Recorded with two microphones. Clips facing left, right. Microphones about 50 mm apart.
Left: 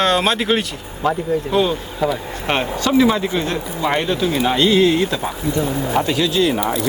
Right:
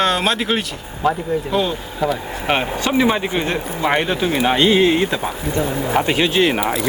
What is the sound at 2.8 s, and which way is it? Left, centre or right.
Speech, right.